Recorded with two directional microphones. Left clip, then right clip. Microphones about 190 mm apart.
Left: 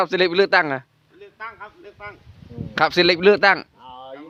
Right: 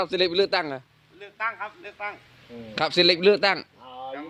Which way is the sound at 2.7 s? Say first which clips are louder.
Left 4 dB; 25° left (ahead or behind).